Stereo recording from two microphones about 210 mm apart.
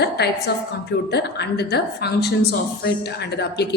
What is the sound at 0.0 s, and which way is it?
A woman's voice, 50° left (ahead or behind).